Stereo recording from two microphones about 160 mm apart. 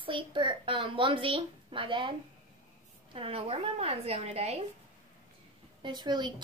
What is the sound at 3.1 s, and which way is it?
A woman's voice, 35° right (ahead or behind).